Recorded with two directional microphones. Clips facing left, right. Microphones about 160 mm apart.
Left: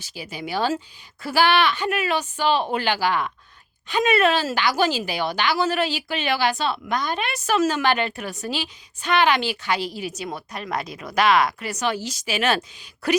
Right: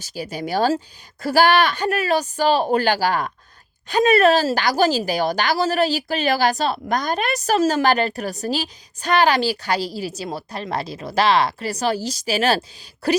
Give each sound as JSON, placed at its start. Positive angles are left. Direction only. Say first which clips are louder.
{"t": 0.0, "sound": "a woman's voice", "louder": "right 5 dB", "side_deg": -40}